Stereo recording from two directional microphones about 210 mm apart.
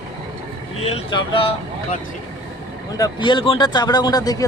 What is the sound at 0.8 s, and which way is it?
Speech, 25° left (ahead or behind).